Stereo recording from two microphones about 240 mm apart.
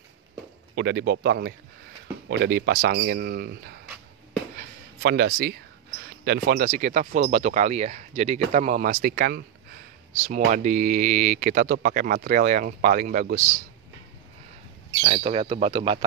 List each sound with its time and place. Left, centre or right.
0.7 s a man's voice: right
4.6 s a sound: right
6.2 s speech: right
15.0 s speech: right